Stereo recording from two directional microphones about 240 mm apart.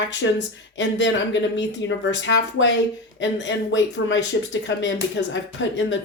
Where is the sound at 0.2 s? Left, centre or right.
Left.